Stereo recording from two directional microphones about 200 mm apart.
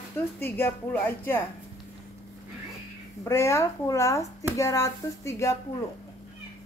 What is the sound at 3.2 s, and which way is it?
Speech, 15° left (ahead or behind).